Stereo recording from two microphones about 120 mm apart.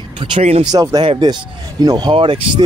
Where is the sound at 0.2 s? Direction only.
50° right (ahead or behind).